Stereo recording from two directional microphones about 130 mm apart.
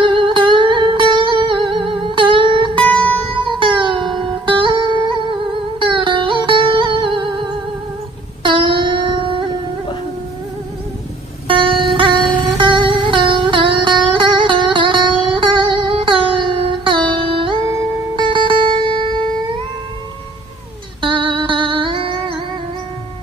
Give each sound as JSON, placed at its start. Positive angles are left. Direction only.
{"t": 0.0, "sound": "music", "side_deg": -40}
{"t": 11.4, "sound": "music", "side_deg": -40}
{"t": 17.6, "sound": "music", "side_deg": -25}
{"t": 18.2, "sound": "music", "side_deg": -40}
{"t": 21.0, "sound": "music", "side_deg": -40}